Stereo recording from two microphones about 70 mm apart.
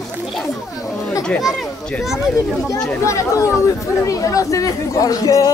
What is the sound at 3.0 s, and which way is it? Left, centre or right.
Speech, left.